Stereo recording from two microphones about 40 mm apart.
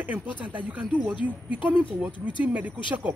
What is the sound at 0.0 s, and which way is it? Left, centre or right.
Speech, right.